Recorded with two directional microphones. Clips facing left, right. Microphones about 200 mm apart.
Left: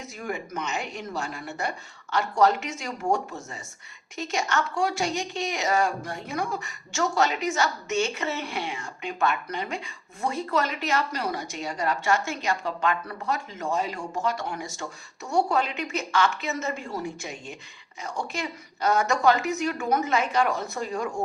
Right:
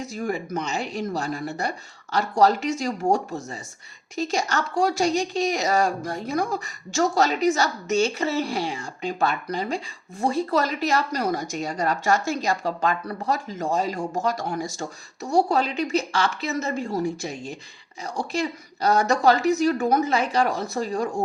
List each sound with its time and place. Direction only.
0.0 s a woman's voice: 35° right (ahead or behind)